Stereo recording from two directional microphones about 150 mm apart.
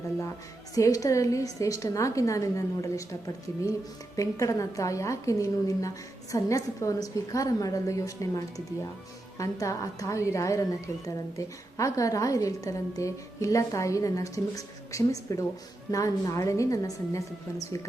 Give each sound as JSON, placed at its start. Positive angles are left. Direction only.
{"t": 0.7, "sound": "a woman's voice", "side_deg": 25}